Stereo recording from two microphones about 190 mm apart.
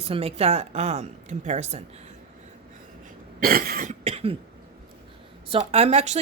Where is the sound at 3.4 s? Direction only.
50° right (ahead or behind).